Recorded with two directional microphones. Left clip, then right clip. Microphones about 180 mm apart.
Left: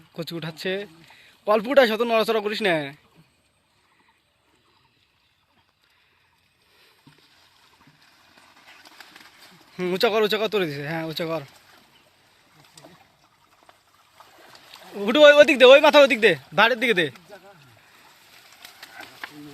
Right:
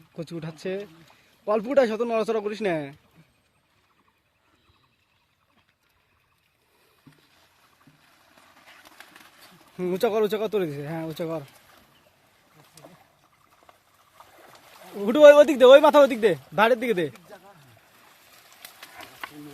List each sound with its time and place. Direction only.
0.1 s speech: centre (ahead or behind)
8.5 s bird: 20° right (ahead or behind)
9.8 s speech: 5° right (ahead or behind)
15.0 s speech: 15° right (ahead or behind)